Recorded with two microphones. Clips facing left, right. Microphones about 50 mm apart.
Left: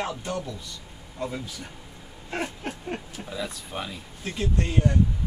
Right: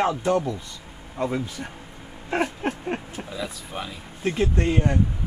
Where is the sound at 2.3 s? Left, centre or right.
Right.